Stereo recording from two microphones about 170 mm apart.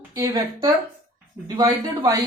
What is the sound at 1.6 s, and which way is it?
Speech, 20° right (ahead or behind).